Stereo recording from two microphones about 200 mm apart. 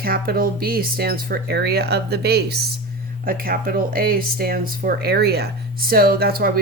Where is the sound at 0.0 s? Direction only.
50° right (ahead or behind).